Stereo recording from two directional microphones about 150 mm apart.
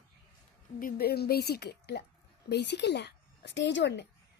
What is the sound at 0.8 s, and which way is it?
A woman's voice, 80° left.